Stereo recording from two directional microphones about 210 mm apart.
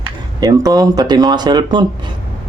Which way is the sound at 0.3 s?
15° right (ahead or behind).